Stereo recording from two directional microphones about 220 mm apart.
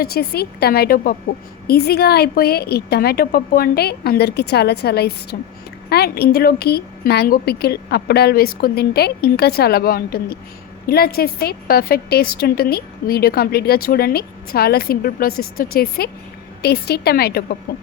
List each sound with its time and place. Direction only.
0.0 s a woman's voice: 45° left (ahead or behind)